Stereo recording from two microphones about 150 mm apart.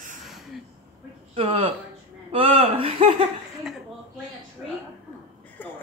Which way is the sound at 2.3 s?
40° right (ahead or behind).